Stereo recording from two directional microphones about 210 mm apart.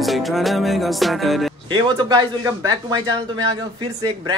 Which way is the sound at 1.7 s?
20° right (ahead or behind).